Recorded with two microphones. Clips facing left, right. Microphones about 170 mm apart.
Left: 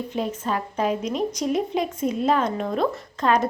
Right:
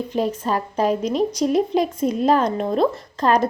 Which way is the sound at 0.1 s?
35° right (ahead or behind).